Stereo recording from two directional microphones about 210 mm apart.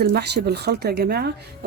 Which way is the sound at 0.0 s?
50° right (ahead or behind).